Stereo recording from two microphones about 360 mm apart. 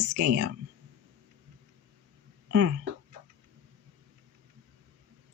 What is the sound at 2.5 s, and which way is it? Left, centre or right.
Speech, right.